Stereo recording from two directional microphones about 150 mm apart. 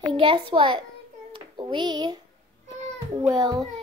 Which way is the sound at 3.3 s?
25° right (ahead or behind).